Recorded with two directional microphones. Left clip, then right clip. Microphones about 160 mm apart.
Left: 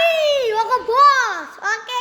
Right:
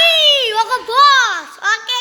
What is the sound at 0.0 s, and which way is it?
Children playing, 15° left (ahead or behind).